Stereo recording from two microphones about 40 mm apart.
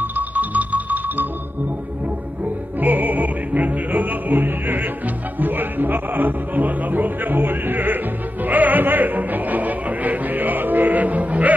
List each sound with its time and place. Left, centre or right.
0.0 s music: right
2.8 s music: right